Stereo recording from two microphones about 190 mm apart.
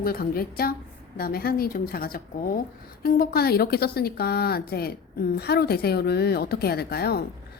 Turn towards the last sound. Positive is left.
turn(degrees=55)  # may be behind; listen again after turning